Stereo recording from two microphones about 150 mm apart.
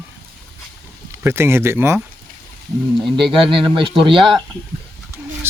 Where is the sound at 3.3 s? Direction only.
35° right (ahead or behind).